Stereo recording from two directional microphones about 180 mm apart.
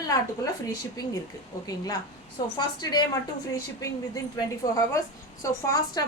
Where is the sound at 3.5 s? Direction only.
20° left (ahead or behind).